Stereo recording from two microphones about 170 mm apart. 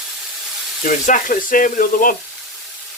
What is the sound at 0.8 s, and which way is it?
Speech, 50° left (ahead or behind).